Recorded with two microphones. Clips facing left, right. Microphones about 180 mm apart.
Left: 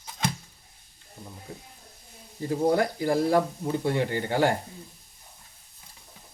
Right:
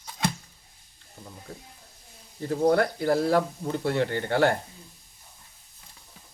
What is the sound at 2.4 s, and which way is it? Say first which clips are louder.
Speech: right 1 dB; 15° left (ahead or behind).